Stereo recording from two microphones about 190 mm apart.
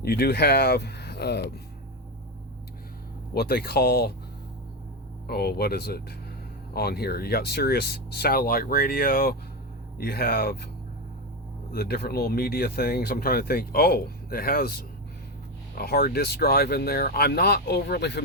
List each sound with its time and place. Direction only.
0.0 s speech: 55° left (ahead or behind)
3.3 s speech: 55° left (ahead or behind)
5.3 s speech: 55° left (ahead or behind)
11.7 s speech: 55° left (ahead or behind)